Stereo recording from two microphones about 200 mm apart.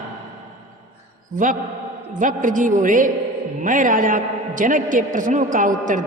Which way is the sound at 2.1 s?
40° right (ahead or behind).